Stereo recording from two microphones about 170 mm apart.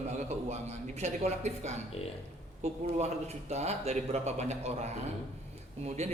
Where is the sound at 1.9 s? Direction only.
40° left (ahead or behind).